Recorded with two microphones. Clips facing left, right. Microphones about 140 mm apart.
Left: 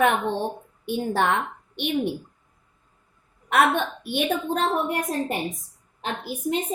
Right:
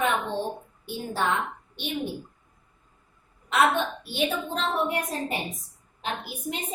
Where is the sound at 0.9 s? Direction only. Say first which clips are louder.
Left 5 dB; 65° left (ahead or behind).